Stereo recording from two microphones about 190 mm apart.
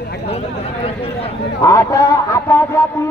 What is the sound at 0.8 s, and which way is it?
Speech, 30° left (ahead or behind).